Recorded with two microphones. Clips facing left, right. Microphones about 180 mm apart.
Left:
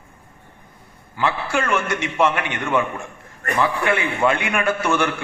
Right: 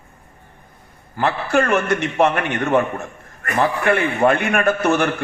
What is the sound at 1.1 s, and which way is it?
Speech, 40° right (ahead or behind).